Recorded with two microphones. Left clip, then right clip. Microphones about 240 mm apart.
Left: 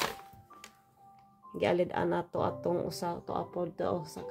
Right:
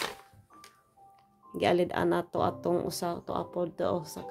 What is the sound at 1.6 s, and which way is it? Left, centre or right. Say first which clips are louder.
Speech: right 3 dB; right.